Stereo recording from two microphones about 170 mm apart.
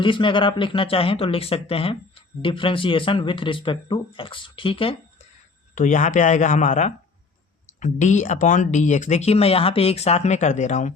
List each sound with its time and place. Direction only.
0.0 s speech: 30° left (ahead or behind)
5.7 s speech: 45° left (ahead or behind)